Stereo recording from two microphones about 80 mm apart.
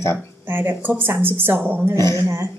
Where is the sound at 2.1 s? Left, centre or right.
Right.